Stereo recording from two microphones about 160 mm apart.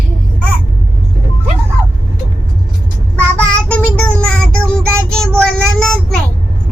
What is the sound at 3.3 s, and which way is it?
Child singing, 10° left (ahead or behind).